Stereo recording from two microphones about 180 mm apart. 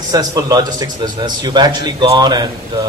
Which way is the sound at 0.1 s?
20° right (ahead or behind).